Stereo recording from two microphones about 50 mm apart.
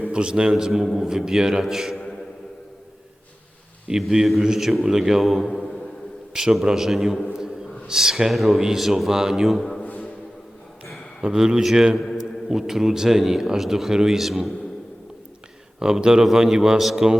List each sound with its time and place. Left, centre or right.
0.1 s a man's voice: centre
0.5 s a man's voice: centre
4.0 s a man's voice: centre
5.5 s a sound: centre
6.3 s a man's voice: centre
7.3 s a sound: centre
8.6 s a man's voice: centre
9.6 s music: centre
9.8 s music: left
11.2 s a man's voice: centre
15.8 s a man's voice: centre